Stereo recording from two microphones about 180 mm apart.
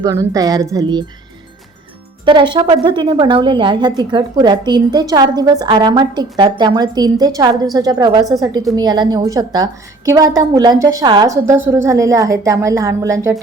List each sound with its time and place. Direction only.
0.0 s a woman's voice: 20° right (ahead or behind)
2.2 s a woman's voice: 25° right (ahead or behind)